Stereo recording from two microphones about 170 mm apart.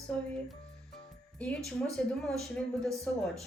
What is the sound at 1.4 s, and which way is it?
A woman's voice, 5° left (ahead or behind).